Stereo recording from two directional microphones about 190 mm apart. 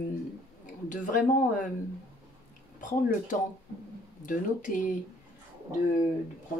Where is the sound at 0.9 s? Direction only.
45° left (ahead or behind).